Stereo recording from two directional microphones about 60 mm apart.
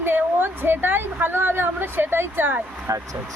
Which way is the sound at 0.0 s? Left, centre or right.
Right.